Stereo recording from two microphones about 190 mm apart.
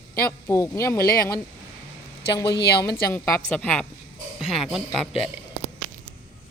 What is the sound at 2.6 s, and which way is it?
Speech, 60° left (ahead or behind).